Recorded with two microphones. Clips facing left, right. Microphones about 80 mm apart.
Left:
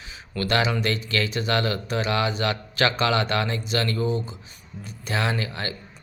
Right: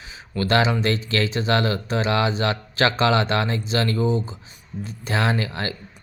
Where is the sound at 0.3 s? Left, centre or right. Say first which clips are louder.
Right 3 dB; right.